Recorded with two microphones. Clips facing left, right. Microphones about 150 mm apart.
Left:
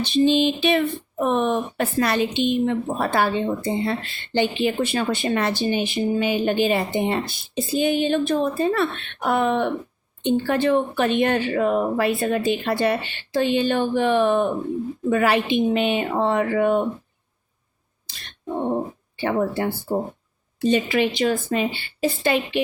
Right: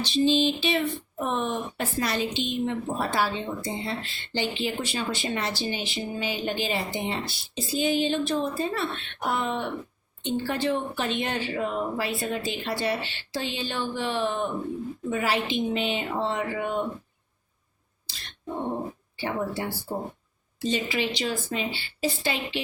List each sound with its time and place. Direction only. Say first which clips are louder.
0.0 s a woman's voice: left 4 dB; 55° left (ahead or behind)
19.1 s a woman's voice: left 7 dB; 60° left (ahead or behind)